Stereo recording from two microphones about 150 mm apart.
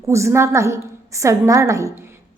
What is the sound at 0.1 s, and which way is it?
A woman's voice, 20° right (ahead or behind).